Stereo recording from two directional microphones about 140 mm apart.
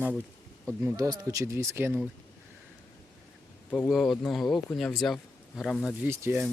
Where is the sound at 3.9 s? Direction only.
5° left (ahead or behind).